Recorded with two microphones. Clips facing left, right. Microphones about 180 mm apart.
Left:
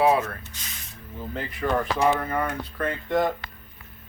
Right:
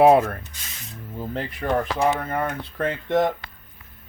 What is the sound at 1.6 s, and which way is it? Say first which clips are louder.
Speech: right 1 dB; 35° right (ahead or behind).